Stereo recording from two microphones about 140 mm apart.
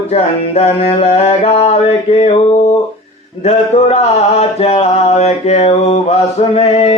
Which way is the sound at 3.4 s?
50° left (ahead or behind).